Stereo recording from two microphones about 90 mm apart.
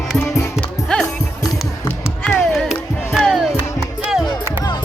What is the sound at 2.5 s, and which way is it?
Music, centre (ahead or behind).